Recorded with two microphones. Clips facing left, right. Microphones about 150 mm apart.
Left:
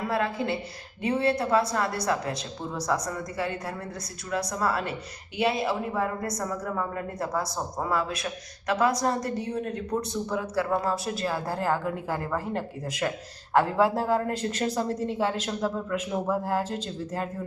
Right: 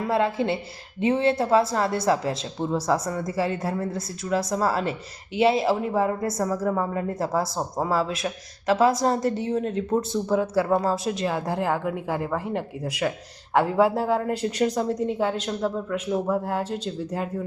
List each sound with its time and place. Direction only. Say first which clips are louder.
0.1 s a woman's voice: right 5 dB; 25° right (ahead or behind)
15.0 s a man's voice: right 3 dB; centre (ahead or behind)
16.5 s speech: right 1 dB; 10° right (ahead or behind)